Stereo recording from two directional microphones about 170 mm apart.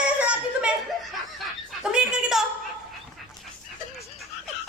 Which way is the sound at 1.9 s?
5° right (ahead or behind).